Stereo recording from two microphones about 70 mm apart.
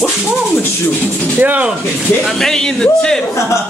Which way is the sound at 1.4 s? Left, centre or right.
Right.